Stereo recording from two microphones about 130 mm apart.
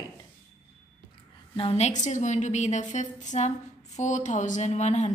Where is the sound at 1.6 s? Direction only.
50° left (ahead or behind).